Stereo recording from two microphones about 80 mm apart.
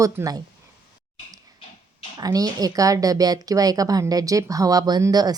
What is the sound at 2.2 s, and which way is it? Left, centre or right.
A woman's voice, right.